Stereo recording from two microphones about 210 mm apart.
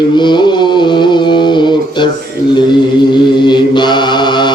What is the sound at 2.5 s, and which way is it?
Chant, 20° left (ahead or behind).